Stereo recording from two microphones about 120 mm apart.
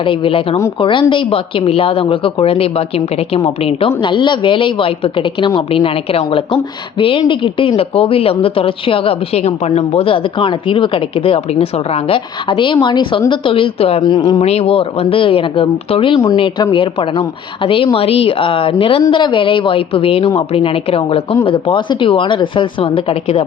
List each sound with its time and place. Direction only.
0.0 s speech: 50° left (ahead or behind)
7.8 s speech: 50° left (ahead or behind)
14.0 s speech: 35° left (ahead or behind)
14.3 s speech: 60° left (ahead or behind)